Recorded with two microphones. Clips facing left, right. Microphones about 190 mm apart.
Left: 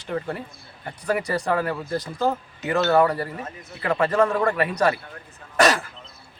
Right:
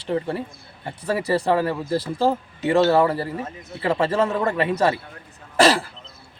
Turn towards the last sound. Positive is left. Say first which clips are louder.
# right 2 dB
turn(degrees=-30)  # may be behind; listen again after turning